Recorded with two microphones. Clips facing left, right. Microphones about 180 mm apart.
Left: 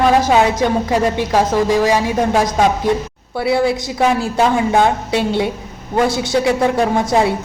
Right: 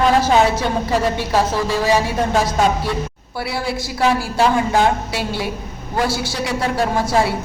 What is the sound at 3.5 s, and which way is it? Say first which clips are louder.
Speech: left 9 dB; 20° left (ahead or behind).